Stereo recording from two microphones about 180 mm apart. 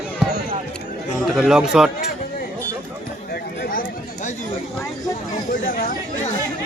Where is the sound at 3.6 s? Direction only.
50° left (ahead or behind).